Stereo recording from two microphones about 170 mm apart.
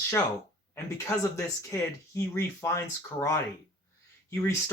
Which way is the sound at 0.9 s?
15° left (ahead or behind).